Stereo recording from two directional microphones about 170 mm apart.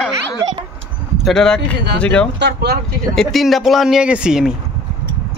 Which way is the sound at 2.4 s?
80° right.